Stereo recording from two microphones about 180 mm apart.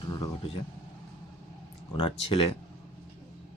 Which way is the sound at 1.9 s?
30° left (ahead or behind).